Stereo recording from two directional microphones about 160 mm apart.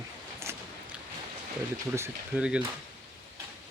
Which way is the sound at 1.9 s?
15° right (ahead or behind).